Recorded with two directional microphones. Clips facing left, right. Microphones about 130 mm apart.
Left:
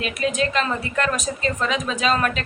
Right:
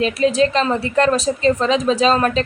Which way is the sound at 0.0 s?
30° right (ahead or behind).